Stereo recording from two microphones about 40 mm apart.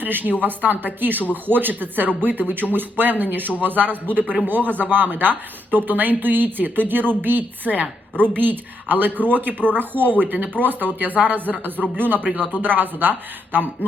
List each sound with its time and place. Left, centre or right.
0.0 s speech: right
7.6 s a woman's voice: right
8.1 s speech: left
8.4 s speech: right